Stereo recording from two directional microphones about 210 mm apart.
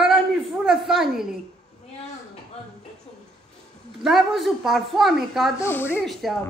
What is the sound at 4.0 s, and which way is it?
A man's voice, centre (ahead or behind).